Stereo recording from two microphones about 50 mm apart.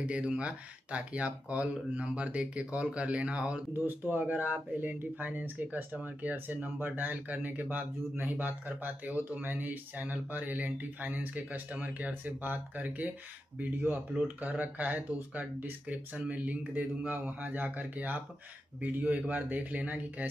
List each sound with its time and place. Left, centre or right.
0.4 s speech: right
3.7 s speech: right